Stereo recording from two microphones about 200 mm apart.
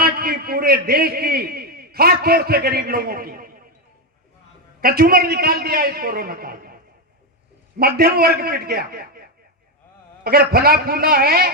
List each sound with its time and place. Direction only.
0.0 s a man's voice: 50° right (ahead or behind)
4.8 s a man's voice: 45° right (ahead or behind)
7.8 s a man's voice: 50° right (ahead or behind)
10.2 s a man's voice: 50° right (ahead or behind)